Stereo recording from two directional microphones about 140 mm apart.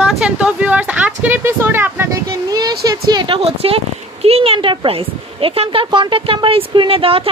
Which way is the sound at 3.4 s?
45° right (ahead or behind).